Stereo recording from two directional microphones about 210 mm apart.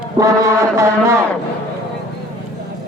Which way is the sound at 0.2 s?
15° right (ahead or behind).